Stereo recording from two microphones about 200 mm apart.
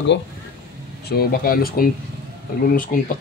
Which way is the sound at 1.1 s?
50° left (ahead or behind).